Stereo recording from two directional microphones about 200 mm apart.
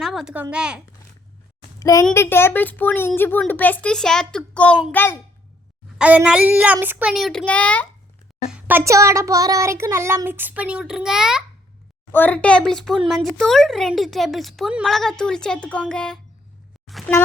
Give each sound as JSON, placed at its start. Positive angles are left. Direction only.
{"t": 0.0, "sound": "a sound", "side_deg": 0}
{"t": 0.5, "sound": "speech", "side_deg": -5}
{"t": 1.8, "sound": "a child's voice", "side_deg": 15}
{"t": 6.0, "sound": "speech", "side_deg": -5}
{"t": 8.4, "sound": "a sound", "side_deg": -5}
{"t": 12.1, "sound": "speech", "side_deg": 10}